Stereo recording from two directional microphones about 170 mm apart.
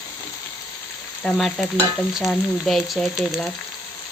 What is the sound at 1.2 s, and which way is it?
Stir, centre (ahead or behind).